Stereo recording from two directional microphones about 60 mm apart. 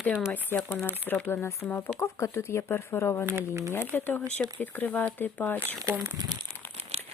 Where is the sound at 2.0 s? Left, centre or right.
Left.